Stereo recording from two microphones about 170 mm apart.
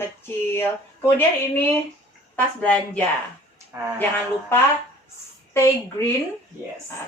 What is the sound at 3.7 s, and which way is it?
Speech, 15° right (ahead or behind).